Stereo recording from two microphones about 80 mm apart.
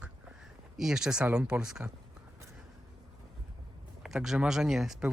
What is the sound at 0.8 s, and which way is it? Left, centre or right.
Speech, centre.